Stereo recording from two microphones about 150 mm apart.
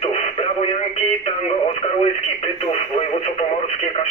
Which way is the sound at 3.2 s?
40° left (ahead or behind).